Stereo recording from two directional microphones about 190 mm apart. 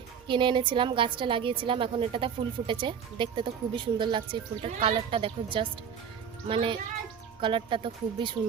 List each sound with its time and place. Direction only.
0.3 s a woman's voice: 25° right (ahead or behind)